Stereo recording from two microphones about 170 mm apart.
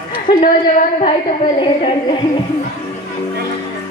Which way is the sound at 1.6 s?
30° left (ahead or behind).